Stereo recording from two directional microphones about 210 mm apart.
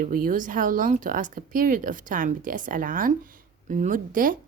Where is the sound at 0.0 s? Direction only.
40° right (ahead or behind).